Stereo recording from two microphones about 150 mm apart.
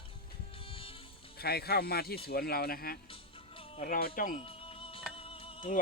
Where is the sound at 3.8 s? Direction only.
75° left (ahead or behind).